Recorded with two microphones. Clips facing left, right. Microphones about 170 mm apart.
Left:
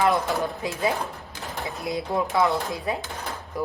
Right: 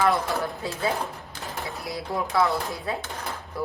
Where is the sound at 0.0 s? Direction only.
20° left (ahead or behind).